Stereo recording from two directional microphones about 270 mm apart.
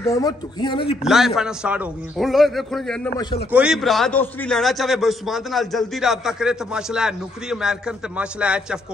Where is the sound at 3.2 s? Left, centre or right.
Centre.